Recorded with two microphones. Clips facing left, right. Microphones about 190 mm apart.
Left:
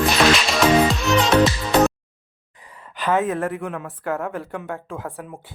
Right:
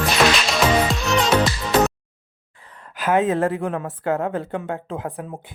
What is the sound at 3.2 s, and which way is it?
Speech, 25° right (ahead or behind).